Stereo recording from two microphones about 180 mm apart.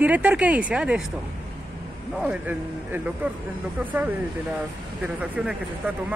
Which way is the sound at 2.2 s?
10° right (ahead or behind).